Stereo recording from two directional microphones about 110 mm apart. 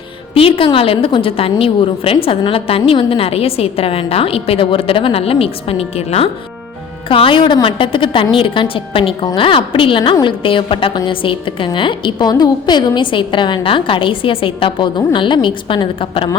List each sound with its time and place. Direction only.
0.3 s a woman's voice: 55° left (ahead or behind)
7.1 s a woman's voice: 50° left (ahead or behind)